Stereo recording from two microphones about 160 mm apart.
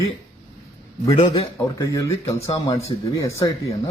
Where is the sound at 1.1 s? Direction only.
40° left (ahead or behind).